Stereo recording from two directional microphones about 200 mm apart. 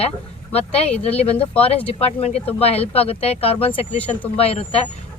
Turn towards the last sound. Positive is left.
turn(degrees=30)  # may be behind; listen again after turning